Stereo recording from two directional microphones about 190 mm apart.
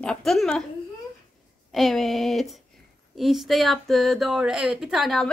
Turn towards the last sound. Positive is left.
turn(degrees=0)  # may be behind; listen again after turning